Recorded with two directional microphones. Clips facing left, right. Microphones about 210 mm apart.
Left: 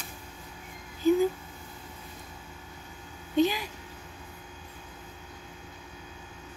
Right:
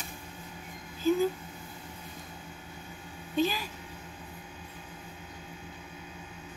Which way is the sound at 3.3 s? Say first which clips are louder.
Left 4 dB; 20° left (ahead or behind).